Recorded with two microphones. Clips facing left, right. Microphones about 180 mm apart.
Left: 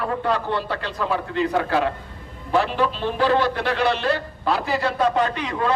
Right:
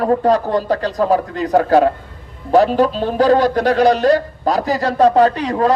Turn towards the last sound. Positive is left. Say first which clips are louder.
# right 9 dB
turn(degrees=-40)  # may be behind; listen again after turning